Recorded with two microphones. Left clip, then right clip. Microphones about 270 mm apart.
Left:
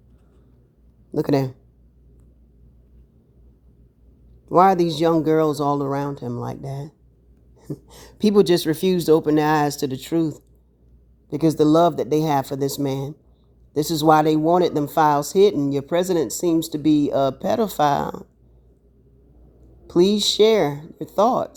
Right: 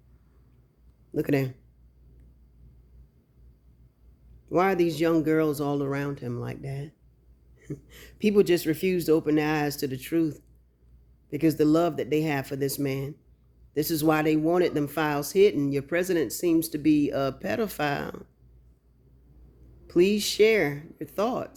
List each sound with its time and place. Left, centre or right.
1.1 s speech: left
4.4 s speech: left
13.7 s speech: left
19.9 s speech: left